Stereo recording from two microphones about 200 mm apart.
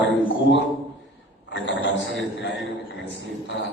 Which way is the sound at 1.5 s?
65° left (ahead or behind).